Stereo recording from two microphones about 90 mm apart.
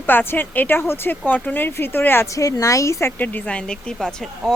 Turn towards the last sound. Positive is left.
turn(degrees=5)  # may be behind; listen again after turning